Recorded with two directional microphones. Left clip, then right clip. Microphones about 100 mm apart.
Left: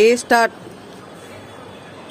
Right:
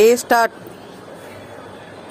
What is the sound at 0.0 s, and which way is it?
Speech, 15° left (ahead or behind).